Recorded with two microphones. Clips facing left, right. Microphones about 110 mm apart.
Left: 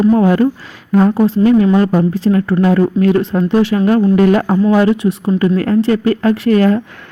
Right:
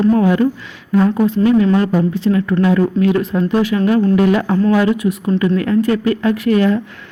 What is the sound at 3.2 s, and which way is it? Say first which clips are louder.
Speech: left 3 dB; 30° left (ahead or behind).